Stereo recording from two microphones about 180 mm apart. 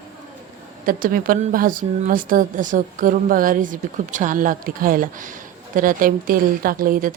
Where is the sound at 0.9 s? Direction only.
50° right (ahead or behind).